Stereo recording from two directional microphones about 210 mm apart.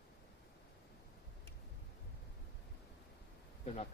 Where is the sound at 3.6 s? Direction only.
30° left (ahead or behind).